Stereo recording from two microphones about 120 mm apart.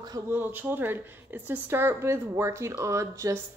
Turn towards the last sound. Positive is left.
turn(degrees=-25)  # may be behind; listen again after turning